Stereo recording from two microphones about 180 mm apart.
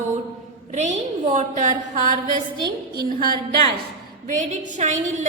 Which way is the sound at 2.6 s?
25° right (ahead or behind).